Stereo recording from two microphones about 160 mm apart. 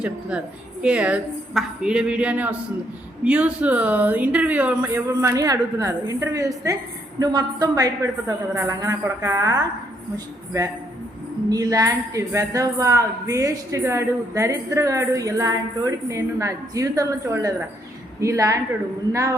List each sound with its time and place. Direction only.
0.0 s a woman's voice: 5° right (ahead or behind)
11.4 s a woman's voice: 20° right (ahead or behind)